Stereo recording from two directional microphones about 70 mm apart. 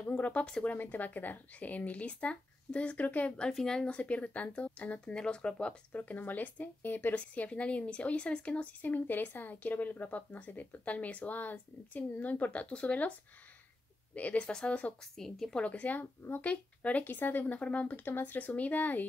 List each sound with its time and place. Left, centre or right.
0.0 s speech: left
5.9 s speech: left
14.1 s a woman's voice: left
15.6 s speech: centre